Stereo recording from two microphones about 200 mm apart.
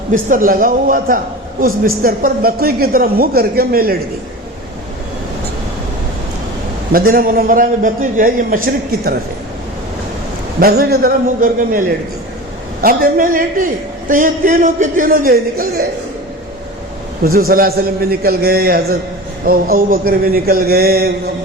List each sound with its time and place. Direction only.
0.1 s a man's voice: 40° right (ahead or behind)
6.9 s a man's voice: 45° right (ahead or behind)
10.6 s a man's voice: 50° right (ahead or behind)
12.8 s a man's voice: 45° right (ahead or behind)
17.2 s a man's voice: 45° right (ahead or behind)